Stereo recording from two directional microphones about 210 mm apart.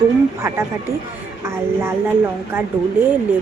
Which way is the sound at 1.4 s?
10° right (ahead or behind).